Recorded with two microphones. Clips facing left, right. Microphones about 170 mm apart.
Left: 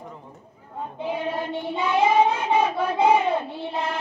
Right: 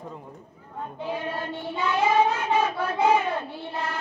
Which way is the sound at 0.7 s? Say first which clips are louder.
Left 3 dB; 20° left (ahead or behind).